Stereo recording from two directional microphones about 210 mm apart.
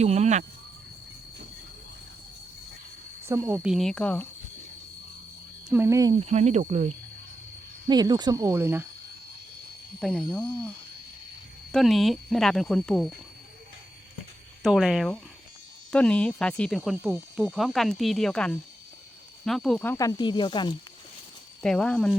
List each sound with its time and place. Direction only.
0.0 s speech: 30° right (ahead or behind)
3.2 s speech: 15° right (ahead or behind); by 4.3 s 5° left (ahead or behind)
5.6 s speech: 10° right (ahead or behind)
6.1 s speech: 30° right (ahead or behind)
7.9 s speech: 20° right (ahead or behind)
10.0 s speech: 5° right (ahead or behind)
11.7 s speech: centre (ahead or behind)
14.6 s speech: centre (ahead or behind); by 20.7 s 20° left (ahead or behind)
21.6 s speech: 5° left (ahead or behind)